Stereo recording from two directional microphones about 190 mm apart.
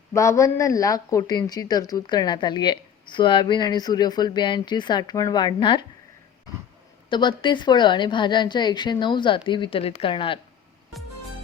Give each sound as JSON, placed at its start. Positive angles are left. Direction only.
{"t": 0.1, "sound": "a woman's voice", "side_deg": 15}
{"t": 7.1, "sound": "a woman's voice", "side_deg": 25}